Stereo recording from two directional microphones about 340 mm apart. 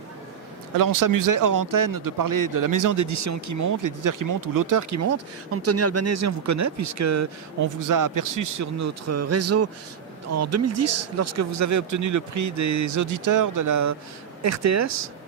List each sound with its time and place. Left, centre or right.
0.8 s speech: right